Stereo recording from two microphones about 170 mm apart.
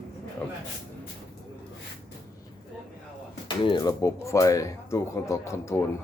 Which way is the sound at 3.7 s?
20° left (ahead or behind).